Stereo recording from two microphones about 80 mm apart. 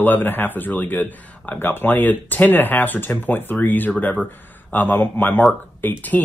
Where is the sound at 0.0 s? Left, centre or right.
Left.